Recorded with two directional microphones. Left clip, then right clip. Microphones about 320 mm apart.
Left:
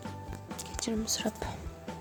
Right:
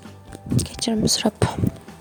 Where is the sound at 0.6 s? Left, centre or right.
Right.